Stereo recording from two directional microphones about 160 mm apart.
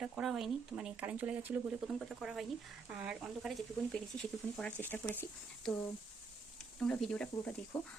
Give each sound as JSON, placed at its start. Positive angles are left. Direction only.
{"t": 0.0, "sound": "speech", "side_deg": 0}